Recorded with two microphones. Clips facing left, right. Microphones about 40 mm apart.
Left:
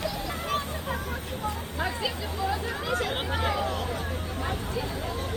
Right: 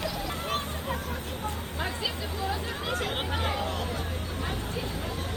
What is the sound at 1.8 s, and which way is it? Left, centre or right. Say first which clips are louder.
Chatter: left 2 dB; left.